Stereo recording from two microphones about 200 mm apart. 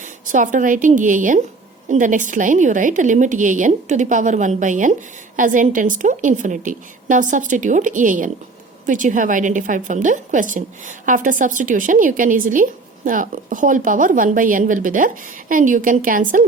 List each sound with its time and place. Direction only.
0.0 s a woman's voice: 40° right (ahead or behind)